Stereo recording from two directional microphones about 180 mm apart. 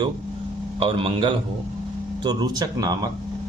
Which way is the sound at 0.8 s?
30° right (ahead or behind).